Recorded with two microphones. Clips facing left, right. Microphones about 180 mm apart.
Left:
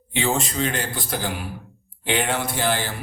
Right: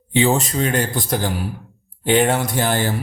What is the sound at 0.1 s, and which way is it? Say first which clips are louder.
A man's voice: right 6 dB; 35° right (ahead or behind).